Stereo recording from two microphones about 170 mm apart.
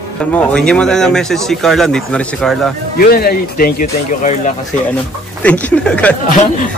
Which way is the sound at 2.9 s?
65° left (ahead or behind).